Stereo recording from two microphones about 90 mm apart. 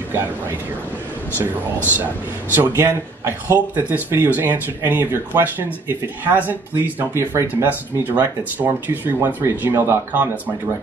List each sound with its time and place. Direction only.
2.5 s speech: 25° right (ahead or behind)